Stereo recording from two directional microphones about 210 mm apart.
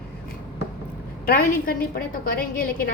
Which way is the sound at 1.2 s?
45° left (ahead or behind).